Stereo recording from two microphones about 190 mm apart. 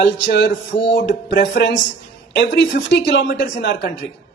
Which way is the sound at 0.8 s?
70° left (ahead or behind).